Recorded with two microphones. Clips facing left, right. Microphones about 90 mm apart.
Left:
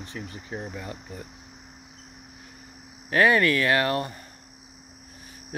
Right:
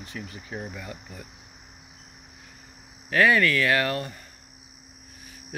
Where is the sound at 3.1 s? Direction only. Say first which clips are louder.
Left 1 dB; 25° left (ahead or behind).